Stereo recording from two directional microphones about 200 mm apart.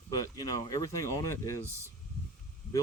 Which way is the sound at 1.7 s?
15° right (ahead or behind).